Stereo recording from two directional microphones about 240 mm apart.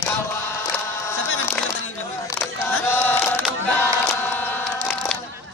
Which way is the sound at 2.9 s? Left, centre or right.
Centre.